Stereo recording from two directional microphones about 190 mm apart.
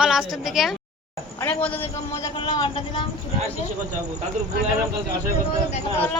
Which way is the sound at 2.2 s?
25° left (ahead or behind).